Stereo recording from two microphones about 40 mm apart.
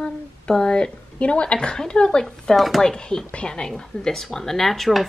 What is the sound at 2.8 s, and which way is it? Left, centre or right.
Speech, centre.